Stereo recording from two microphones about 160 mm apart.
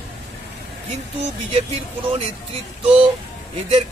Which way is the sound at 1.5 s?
40° right (ahead or behind).